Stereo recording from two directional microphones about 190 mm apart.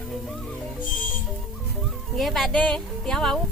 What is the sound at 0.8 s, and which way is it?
Music, 45° left (ahead or behind).